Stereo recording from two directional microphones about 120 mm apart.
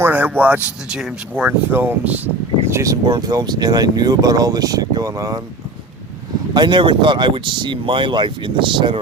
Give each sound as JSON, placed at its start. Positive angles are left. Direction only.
{"t": 0.0, "sound": "speech", "side_deg": -15}
{"t": 6.5, "sound": "speech", "side_deg": -40}